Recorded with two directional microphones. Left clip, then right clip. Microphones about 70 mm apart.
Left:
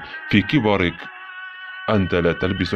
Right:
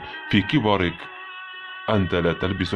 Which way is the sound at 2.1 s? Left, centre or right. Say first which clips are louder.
Left 3 dB; left.